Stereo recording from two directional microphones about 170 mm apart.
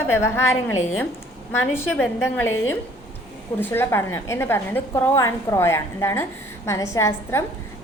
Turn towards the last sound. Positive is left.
turn(degrees=15)  # may be behind; listen again after turning